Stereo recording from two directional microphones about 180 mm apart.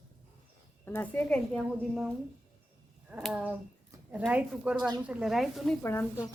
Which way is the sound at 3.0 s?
5° right (ahead or behind).